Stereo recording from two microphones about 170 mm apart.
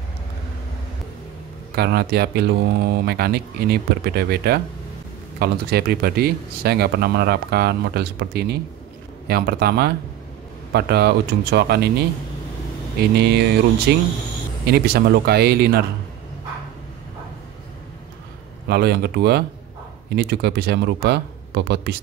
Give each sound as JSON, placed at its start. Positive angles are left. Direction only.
{"t": 1.8, "sound": "speech", "side_deg": -70}
{"t": 13.1, "sound": "speech", "side_deg": -75}
{"t": 18.7, "sound": "speech", "side_deg": -70}